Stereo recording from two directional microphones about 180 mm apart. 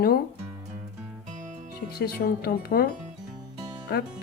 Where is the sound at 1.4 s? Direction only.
45° right (ahead or behind).